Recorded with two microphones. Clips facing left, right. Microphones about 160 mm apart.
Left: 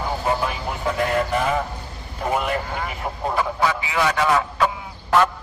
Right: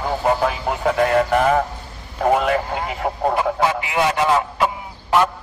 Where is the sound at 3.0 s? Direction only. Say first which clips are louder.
Right 6 dB; 70° right (ahead or behind).